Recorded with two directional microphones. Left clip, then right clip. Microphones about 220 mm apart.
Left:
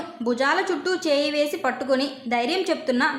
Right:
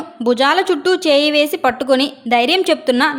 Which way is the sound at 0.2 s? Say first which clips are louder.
Right 8 dB; 35° right (ahead or behind).